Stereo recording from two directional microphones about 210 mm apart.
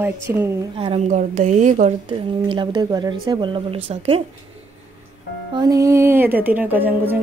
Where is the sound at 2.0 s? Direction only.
25° right (ahead or behind).